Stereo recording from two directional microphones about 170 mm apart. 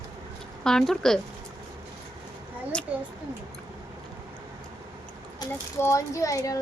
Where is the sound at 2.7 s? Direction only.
5° left (ahead or behind).